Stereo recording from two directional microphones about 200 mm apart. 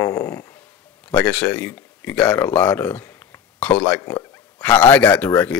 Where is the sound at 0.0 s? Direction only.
20° left (ahead or behind).